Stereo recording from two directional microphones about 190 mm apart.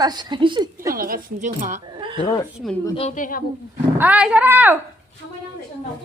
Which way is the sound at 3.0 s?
40° left (ahead or behind).